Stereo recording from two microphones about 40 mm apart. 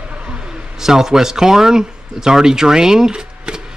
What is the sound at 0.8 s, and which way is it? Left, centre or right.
Speech, centre.